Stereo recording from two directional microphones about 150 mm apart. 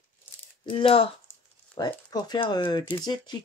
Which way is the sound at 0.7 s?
35° left (ahead or behind).